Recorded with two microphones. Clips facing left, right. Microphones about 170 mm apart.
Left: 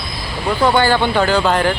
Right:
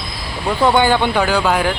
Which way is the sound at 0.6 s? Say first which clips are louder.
Right 1 dB; 20° right (ahead or behind).